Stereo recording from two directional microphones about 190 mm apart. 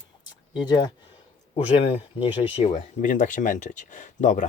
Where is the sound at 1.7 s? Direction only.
35° left (ahead or behind).